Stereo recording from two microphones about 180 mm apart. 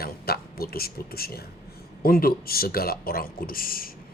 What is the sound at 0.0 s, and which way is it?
A man's voice, 55° left (ahead or behind).